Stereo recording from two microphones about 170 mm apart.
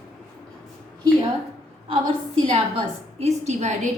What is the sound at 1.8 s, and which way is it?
Speech, 30° right (ahead or behind).